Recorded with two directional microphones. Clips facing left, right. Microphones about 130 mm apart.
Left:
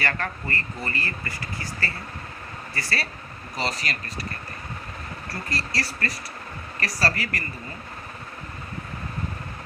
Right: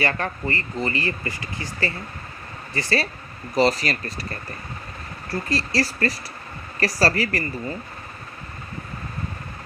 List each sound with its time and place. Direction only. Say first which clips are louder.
0.0 s speech: right 4 dB; 20° right (ahead or behind)
3.5 s speech: right 10 dB; 40° right (ahead or behind)
5.5 s speech: right 7 dB; 30° right (ahead or behind)